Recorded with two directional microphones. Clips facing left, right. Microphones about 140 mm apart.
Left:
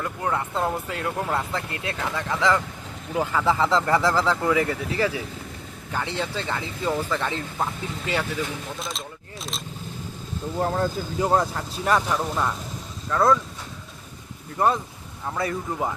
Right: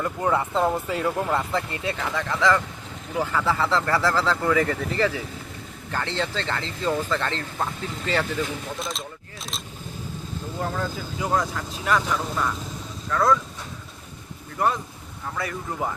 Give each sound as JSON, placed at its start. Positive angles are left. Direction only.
{"t": 0.0, "sound": "speech", "side_deg": -5}
{"t": 2.3, "sound": "speech", "side_deg": 15}
{"t": 8.8, "sound": "a sound", "side_deg": 0}
{"t": 10.6, "sound": "speech", "side_deg": 35}
{"t": 15.4, "sound": "speech", "side_deg": 25}